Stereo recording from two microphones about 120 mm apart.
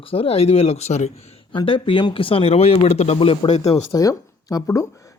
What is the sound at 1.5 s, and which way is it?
Speech, 45° left (ahead or behind).